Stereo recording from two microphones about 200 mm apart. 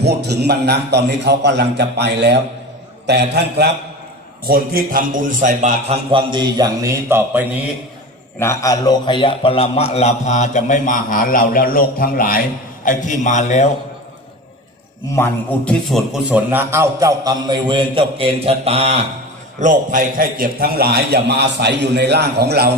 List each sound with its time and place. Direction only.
0.0 s a man's voice: 55° right (ahead or behind); by 6.0 s 40° right (ahead or behind)
6.1 s a man's voice: 25° right (ahead or behind)
8.4 s a man's voice: 15° left (ahead or behind); by 13.7 s 35° left (ahead or behind)
15.1 s a man's voice: 10° left (ahead or behind); by 22.7 s 50° right (ahead or behind)